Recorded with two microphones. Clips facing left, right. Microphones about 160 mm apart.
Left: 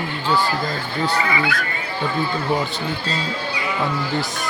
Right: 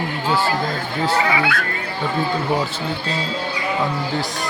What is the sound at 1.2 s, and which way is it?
Speech, 70° right (ahead or behind).